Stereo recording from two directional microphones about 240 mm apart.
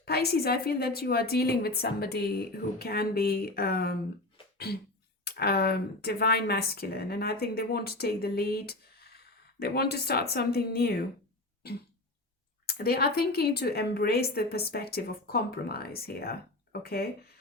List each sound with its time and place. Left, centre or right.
0.0 s speech: left
4.5 s cough: left
5.2 s speech: left
12.6 s speech: left